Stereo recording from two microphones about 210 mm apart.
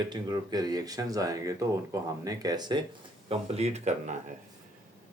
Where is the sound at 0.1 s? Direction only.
20° right (ahead or behind).